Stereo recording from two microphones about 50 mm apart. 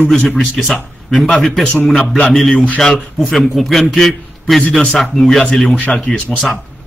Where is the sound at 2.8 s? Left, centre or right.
Centre.